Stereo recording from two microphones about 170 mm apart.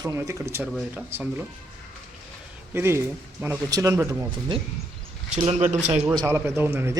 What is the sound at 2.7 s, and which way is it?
Speech, 15° right (ahead or behind).